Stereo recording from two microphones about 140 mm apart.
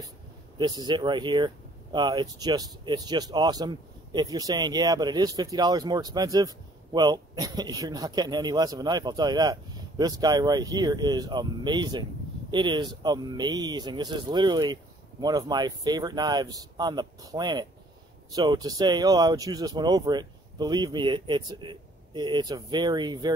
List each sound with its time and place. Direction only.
0.6 s speech: 30° right (ahead or behind)